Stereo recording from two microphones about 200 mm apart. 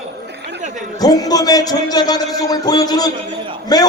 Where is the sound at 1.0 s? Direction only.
20° left (ahead or behind).